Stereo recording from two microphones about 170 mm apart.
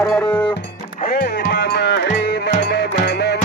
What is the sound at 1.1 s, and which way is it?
Music, 60° left (ahead or behind).